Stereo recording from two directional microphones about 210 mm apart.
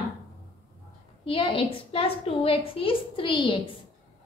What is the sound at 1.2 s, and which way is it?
A woman's voice, 25° left (ahead or behind).